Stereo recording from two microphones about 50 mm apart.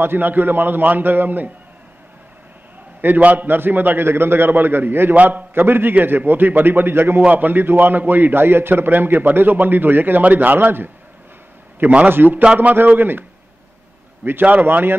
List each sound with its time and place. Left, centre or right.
0.0 s a man's voice: right
3.2 s a man's voice: right
3.4 s a man's voice: right
5.1 s a man's voice: right
5.5 s a man's voice: right
7.2 s a man's voice: right
12.1 s a man's voice: right
14.4 s a man's voice: right